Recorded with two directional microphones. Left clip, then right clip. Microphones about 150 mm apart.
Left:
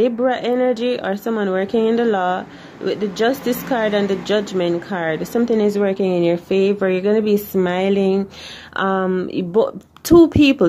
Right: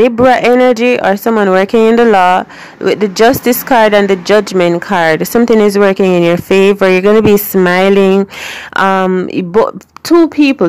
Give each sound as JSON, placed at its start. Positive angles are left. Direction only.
{"t": 0.0, "sound": "a woman's voice", "side_deg": -45}
{"t": 10.1, "sound": "speech", "side_deg": -25}